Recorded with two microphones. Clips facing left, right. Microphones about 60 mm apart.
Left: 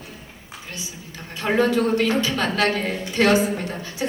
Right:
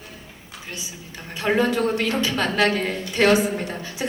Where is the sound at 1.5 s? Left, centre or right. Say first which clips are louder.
Left 3 dB; centre.